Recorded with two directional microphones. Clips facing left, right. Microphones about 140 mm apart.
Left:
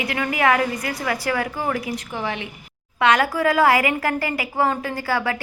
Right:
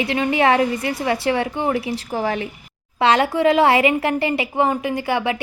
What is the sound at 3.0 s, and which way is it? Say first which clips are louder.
A woman's voice: right 2 dB; 30° right (ahead or behind).